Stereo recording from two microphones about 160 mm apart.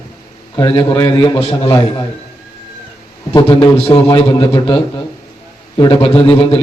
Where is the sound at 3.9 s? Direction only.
30° left (ahead or behind).